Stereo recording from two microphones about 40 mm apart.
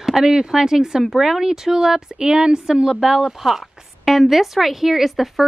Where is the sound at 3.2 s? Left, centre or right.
Centre.